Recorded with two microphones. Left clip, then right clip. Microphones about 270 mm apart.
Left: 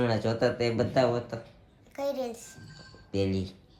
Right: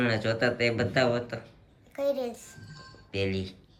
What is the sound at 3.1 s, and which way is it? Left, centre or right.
Speech, centre.